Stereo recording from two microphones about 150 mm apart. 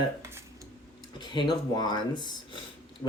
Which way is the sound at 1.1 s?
30° left (ahead or behind).